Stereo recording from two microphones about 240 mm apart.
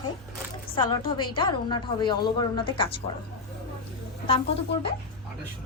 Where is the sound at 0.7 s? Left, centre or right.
Centre.